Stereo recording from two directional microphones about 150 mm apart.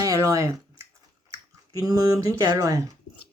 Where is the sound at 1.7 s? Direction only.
25° right (ahead or behind).